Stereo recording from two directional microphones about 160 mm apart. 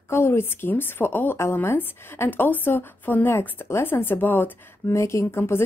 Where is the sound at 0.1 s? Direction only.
15° left (ahead or behind).